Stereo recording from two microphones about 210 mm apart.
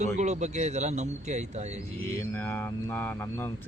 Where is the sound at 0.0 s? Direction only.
35° right (ahead or behind).